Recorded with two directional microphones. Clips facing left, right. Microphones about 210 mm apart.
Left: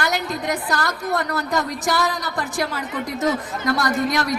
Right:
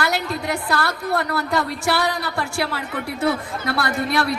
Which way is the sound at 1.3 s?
40° left (ahead or behind).